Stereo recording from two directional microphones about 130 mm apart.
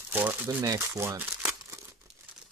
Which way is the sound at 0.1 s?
15° right (ahead or behind).